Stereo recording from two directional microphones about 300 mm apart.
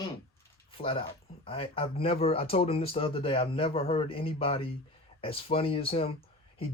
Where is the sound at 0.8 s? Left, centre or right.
Centre.